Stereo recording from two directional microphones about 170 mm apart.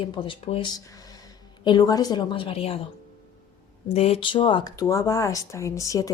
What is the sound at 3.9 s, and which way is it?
A woman's voice, 35° left (ahead or behind).